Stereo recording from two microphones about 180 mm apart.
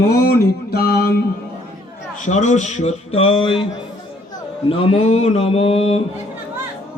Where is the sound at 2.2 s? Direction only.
40° left (ahead or behind).